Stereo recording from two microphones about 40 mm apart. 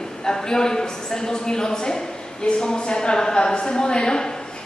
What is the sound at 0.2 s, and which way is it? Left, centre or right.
A woman's voice, centre.